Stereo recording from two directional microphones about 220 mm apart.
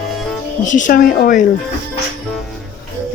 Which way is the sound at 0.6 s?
35° left (ahead or behind).